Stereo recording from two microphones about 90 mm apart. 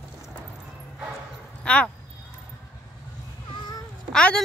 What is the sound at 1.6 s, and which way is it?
Speech, 10° left (ahead or behind).